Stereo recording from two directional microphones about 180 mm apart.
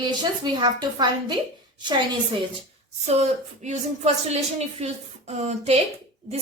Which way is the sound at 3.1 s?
35° right (ahead or behind).